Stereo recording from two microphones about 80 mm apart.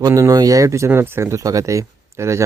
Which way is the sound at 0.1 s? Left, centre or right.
Right.